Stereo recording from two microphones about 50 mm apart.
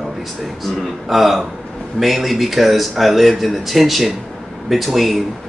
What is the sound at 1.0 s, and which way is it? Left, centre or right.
Speech, centre.